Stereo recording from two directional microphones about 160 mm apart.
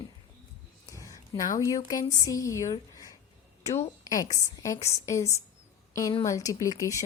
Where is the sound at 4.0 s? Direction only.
20° left (ahead or behind).